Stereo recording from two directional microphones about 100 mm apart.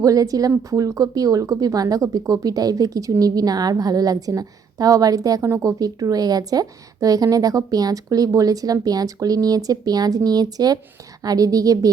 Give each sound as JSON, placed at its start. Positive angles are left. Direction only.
{"t": 0.0, "sound": "speech", "side_deg": -35}